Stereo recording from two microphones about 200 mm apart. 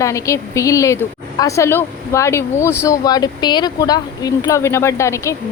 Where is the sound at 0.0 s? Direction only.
15° left (ahead or behind).